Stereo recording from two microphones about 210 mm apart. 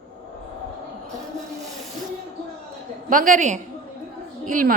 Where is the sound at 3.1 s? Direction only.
40° right (ahead or behind).